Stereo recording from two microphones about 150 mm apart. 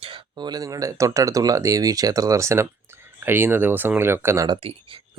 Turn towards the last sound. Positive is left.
turn(degrees=-35)  # may be behind; listen again after turning